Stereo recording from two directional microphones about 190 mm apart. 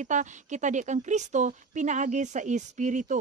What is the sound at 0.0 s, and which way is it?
Speech, 40° right (ahead or behind).